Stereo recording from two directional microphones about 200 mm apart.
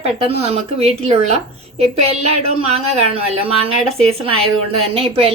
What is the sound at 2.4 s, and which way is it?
Speech, 30° right (ahead or behind).